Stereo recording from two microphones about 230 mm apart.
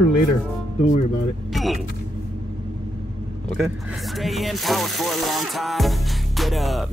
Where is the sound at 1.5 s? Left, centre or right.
Centre.